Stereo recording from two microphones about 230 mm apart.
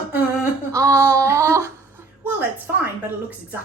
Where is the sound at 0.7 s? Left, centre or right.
Centre.